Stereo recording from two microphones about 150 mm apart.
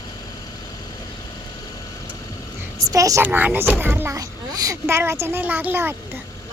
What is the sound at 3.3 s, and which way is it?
Speech, 10° right (ahead or behind).